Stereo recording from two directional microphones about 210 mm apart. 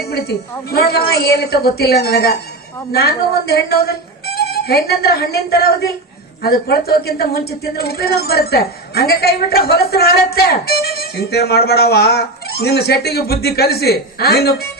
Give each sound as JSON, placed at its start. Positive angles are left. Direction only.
{"t": 0.1, "sound": "speech", "side_deg": 50}